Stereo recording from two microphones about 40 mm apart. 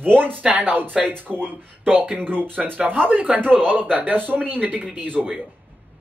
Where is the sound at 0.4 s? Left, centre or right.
Right.